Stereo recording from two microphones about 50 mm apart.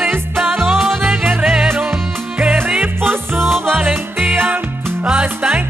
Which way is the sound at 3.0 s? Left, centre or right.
Right.